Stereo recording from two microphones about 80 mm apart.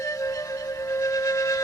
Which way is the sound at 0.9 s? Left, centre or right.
Left.